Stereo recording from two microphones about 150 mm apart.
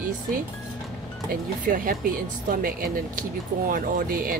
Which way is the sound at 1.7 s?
65° right (ahead or behind).